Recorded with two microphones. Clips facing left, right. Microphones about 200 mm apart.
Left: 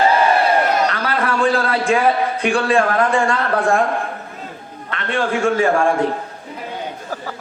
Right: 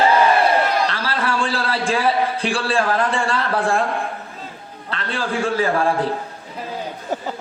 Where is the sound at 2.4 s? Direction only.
30° right (ahead or behind).